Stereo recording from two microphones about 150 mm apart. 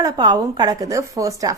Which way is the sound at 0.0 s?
25° right (ahead or behind).